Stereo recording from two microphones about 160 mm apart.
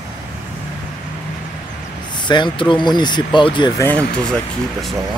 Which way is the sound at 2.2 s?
30° left (ahead or behind).